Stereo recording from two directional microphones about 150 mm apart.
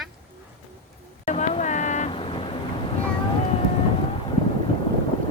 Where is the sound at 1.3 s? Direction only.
50° left (ahead or behind).